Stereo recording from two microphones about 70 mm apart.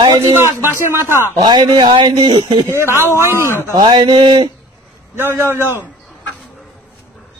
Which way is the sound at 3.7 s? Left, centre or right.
Right.